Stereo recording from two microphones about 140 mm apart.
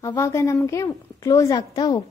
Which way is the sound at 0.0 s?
20° left (ahead or behind).